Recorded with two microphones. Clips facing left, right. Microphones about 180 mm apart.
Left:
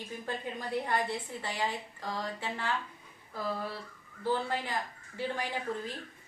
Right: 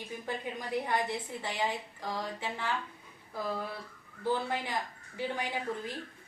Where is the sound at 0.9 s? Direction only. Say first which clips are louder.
Even; 15° right (ahead or behind).